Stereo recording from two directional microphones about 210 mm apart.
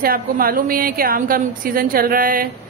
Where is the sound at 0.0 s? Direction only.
45° right (ahead or behind).